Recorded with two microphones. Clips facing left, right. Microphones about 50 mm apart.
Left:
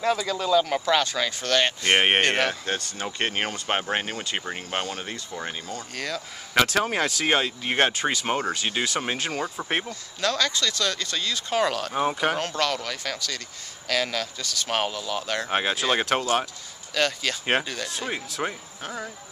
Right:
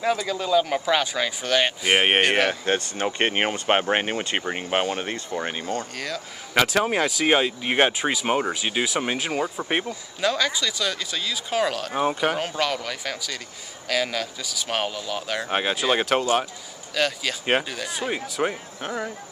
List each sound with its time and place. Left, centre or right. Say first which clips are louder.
0.0 s speech: even; centre
2.6 s speech: right 6 dB; right
5.9 s speech: even; centre
18.5 s speech: right 4 dB; centre